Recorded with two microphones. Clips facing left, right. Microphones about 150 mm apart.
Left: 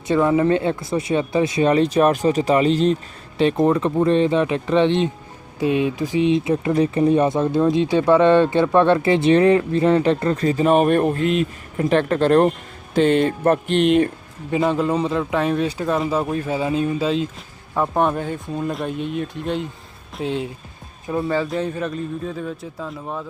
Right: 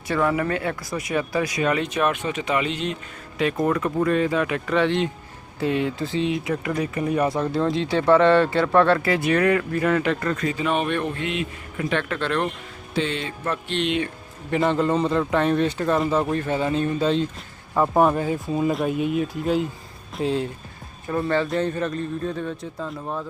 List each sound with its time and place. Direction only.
0.1 s speech: 20° left (ahead or behind); by 14.1 s 45° left (ahead or behind)
14.6 s speech: 5° left (ahead or behind)